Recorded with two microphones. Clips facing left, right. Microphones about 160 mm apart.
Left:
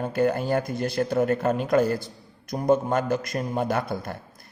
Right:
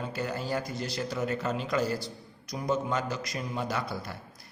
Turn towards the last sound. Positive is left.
turn(degrees=50)  # may be behind; listen again after turning